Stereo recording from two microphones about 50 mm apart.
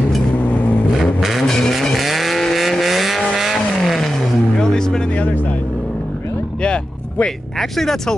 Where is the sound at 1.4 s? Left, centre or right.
Centre.